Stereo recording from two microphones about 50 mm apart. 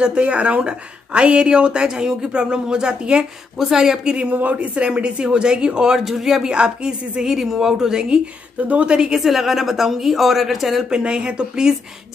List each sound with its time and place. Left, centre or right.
0.0 s a woman's voice: right
4.3 s speech: right; by 6.5 s centre
6.5 s a woman's voice: centre
9.1 s speech: centre
10.9 s speech: centre